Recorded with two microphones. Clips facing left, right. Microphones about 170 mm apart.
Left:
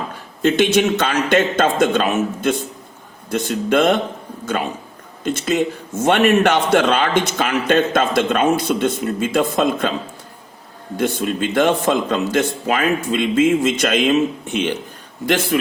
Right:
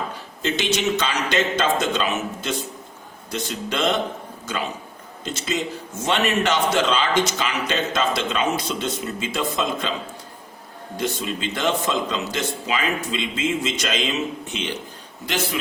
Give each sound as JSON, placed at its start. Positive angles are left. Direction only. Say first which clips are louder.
{"t": 0.4, "sound": "a man's voice", "louder": "left 8 dB", "side_deg": 55}
{"t": 10.9, "sound": "a man's voice", "louder": "left 6 dB", "side_deg": 55}